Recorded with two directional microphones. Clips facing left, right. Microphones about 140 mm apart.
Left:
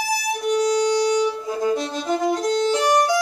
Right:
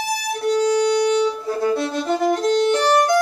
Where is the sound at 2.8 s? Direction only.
10° left (ahead or behind).